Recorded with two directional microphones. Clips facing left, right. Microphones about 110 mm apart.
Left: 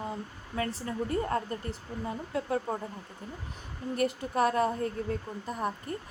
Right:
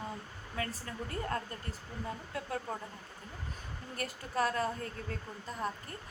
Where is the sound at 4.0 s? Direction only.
20° left (ahead or behind).